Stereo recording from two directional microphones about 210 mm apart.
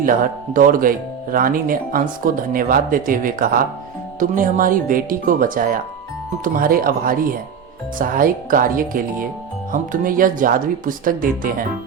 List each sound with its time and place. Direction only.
0.0 s speech: 40° right (ahead or behind)